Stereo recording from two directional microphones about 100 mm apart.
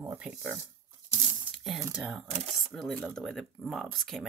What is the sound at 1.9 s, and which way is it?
Speech, 10° right (ahead or behind).